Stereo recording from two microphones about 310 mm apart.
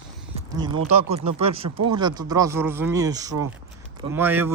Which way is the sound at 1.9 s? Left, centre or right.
Centre.